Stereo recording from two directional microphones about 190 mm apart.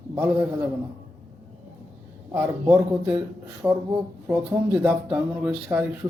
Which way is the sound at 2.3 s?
15° right (ahead or behind).